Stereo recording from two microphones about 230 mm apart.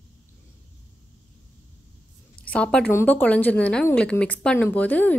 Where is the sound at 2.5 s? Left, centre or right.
Centre.